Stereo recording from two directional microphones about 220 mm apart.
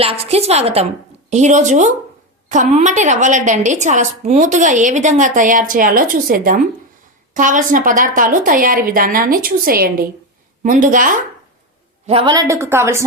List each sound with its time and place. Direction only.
0.0 s a woman's voice: 25° right (ahead or behind)
12.0 s a woman's voice: 25° right (ahead or behind)